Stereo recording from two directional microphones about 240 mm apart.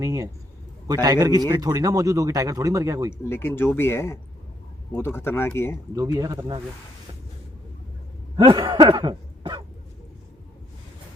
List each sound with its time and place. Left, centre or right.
0.0 s speech: centre
3.2 s speech: centre
5.9 s speech: centre
8.4 s speech: centre